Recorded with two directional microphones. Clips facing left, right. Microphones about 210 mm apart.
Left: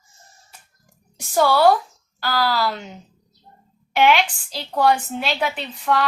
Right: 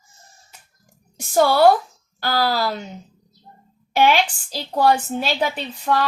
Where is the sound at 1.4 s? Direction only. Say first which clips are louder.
Right 1 dB; 50° right (ahead or behind).